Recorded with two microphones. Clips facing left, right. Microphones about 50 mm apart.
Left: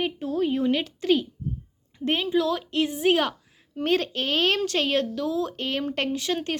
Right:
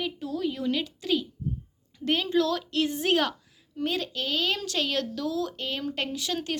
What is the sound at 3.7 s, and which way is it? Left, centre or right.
A woman's voice, left.